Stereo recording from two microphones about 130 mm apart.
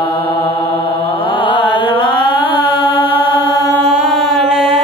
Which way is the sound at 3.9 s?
Centre (ahead or behind).